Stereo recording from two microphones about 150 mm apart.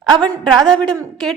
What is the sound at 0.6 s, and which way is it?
Speech, 5° left (ahead or behind).